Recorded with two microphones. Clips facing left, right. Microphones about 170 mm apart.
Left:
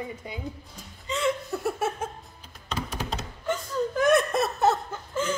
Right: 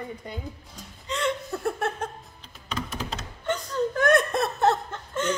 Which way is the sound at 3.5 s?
Centre (ahead or behind).